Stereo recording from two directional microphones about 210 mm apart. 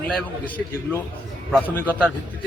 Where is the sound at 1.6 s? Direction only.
10° left (ahead or behind).